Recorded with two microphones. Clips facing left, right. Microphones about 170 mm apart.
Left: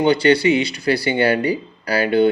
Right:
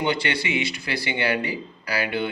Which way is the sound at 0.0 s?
35° left (ahead or behind).